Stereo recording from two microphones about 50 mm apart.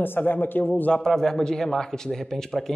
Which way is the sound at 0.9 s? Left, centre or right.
Centre.